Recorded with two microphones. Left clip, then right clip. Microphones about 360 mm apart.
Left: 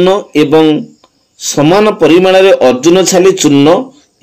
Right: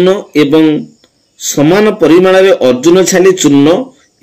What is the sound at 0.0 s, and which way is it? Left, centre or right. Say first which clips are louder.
A man's voice: even; centre.